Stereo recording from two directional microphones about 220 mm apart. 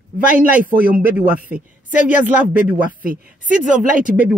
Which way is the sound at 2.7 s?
40° right (ahead or behind).